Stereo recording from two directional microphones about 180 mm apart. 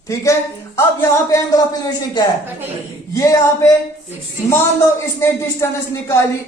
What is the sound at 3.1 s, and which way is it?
Speech, 20° left (ahead or behind).